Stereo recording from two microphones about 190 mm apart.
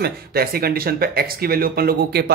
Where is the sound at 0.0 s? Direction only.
55° right (ahead or behind).